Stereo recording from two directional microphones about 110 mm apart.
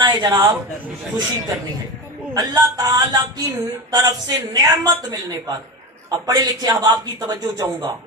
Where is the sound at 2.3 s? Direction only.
35° right (ahead or behind).